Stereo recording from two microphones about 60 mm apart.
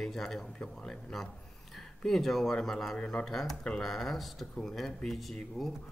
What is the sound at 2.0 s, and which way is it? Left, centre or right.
Speech, centre.